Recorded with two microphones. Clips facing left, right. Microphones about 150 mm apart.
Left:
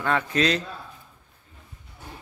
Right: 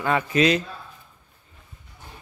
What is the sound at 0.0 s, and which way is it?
Pigeon, 10° right (ahead or behind).